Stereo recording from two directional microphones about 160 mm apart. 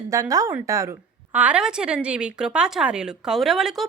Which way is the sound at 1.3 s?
5° right (ahead or behind).